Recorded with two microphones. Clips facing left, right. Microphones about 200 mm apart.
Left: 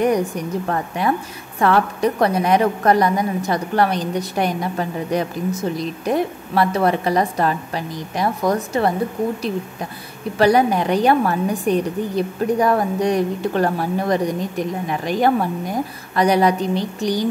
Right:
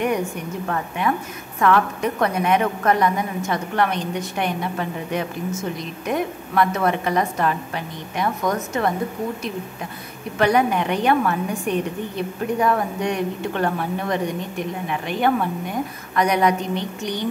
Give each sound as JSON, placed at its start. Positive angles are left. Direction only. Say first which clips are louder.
{"t": 0.0, "sound": "a woman's voice", "louder": "left 4 dB", "side_deg": 35}
{"t": 10.3, "sound": "a woman's voice", "louder": "left 3 dB", "side_deg": 35}